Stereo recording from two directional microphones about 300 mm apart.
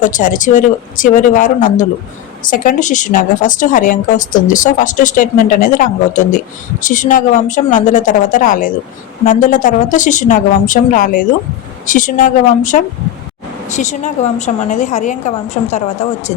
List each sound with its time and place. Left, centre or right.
0.0 s a woman's voice: left